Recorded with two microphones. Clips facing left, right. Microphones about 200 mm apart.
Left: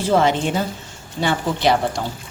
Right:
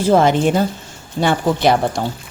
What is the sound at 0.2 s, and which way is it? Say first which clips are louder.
Speech: right 4 dB; 45° right (ahead or behind).